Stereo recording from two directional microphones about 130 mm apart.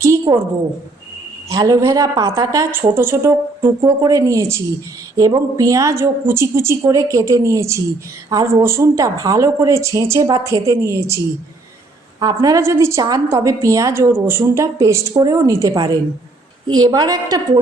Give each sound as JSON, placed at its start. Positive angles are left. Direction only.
{"t": 0.3, "sound": "a woman's voice", "side_deg": -35}
{"t": 1.5, "sound": "a woman's voice", "side_deg": -25}
{"t": 12.2, "sound": "a woman's voice", "side_deg": -30}